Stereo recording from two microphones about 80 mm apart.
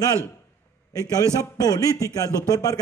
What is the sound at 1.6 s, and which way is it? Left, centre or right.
Speech, left.